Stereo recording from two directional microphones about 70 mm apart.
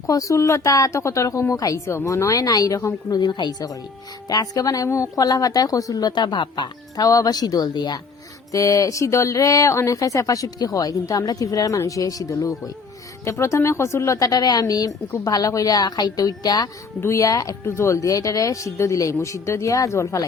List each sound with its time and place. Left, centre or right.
0.1 s speech: left
3.1 s a woman's voice: left
4.3 s a woman's voice: left
8.5 s speech: left
13.2 s a woman's voice: left
17.0 s a woman's voice: left
17.7 s speech: left